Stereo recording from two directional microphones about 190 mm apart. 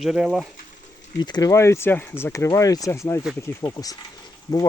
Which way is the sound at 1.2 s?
20° left (ahead or behind).